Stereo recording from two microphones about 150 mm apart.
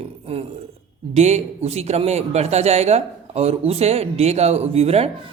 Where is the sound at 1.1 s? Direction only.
50° right (ahead or behind).